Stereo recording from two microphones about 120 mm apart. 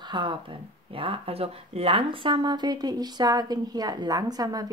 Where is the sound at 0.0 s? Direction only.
40° right (ahead or behind).